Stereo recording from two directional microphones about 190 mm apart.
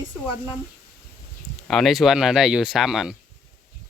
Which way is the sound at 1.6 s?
Centre (ahead or behind).